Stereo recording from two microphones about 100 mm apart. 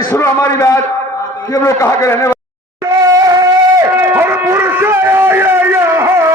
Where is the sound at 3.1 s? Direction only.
35° right (ahead or behind).